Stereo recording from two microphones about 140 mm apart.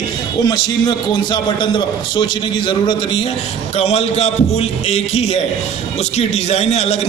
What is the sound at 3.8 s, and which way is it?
A man's voice, 50° left (ahead or behind).